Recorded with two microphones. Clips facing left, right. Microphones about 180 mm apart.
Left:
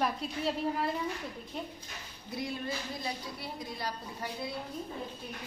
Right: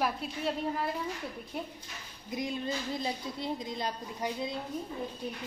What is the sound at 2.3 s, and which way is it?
A woman's voice, 20° right (ahead or behind).